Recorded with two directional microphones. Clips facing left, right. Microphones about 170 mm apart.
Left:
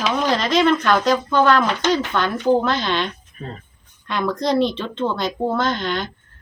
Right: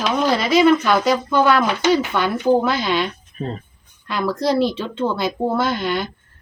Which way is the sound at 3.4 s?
30° right (ahead or behind).